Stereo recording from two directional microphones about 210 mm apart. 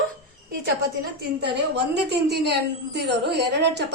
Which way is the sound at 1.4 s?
55° right (ahead or behind).